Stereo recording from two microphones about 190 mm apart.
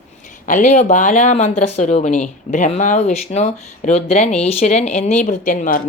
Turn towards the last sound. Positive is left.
turn(degrees=45)  # may be behind; listen again after turning